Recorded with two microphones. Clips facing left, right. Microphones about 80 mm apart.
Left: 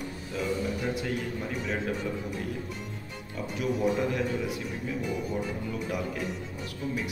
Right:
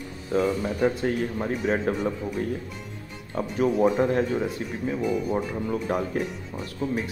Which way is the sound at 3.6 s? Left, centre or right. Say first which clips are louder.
Right 6 dB; right.